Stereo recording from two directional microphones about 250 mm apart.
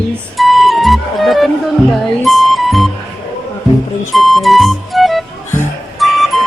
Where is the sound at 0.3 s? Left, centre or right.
Centre.